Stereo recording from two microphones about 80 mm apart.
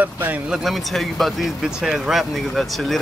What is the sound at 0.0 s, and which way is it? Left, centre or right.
Speech, right.